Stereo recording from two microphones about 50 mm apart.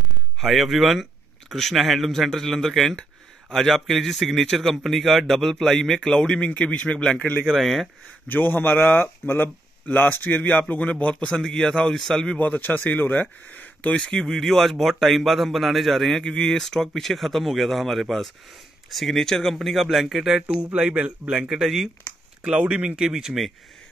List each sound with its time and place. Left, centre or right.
0.4 s a man's voice: centre; by 7.4 s left
7.4 s a man's voice: centre
8.3 s a man's voice: left
11.4 s a man's voice: centre
12.4 s speech: left
14.1 s a man's voice: centre
20.4 s speech: right
21.5 s speech: centre
22.4 s speech: centre